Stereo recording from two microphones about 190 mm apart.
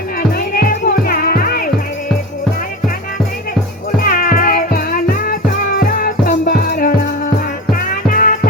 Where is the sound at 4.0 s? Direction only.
50° left (ahead or behind).